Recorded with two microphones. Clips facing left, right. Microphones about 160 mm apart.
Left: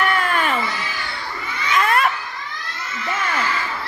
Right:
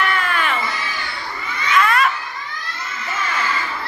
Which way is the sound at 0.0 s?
45° left (ahead or behind).